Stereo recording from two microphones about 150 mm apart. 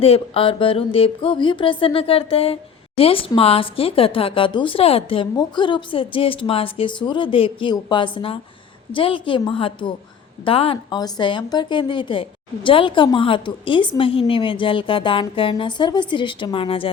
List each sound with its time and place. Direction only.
0.0 s a woman's voice: 40° left (ahead or behind)